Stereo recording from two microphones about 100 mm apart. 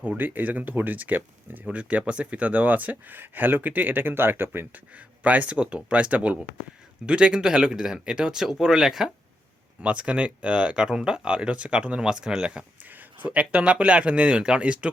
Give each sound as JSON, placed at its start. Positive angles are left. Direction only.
{"t": 0.0, "sound": "speech", "side_deg": -15}